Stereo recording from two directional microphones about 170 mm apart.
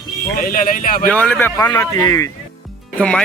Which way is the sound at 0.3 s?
55° left (ahead or behind).